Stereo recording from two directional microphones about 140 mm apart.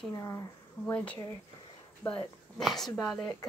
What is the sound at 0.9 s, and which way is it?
Speech, 10° left (ahead or behind).